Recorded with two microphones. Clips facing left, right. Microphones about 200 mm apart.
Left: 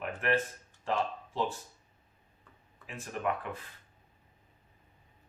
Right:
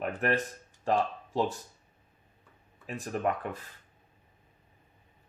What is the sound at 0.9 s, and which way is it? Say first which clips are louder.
Speech: right 4 dB; 40° right (ahead or behind).